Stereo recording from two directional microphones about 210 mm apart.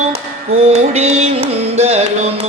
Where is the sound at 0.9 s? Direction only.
30° right (ahead or behind).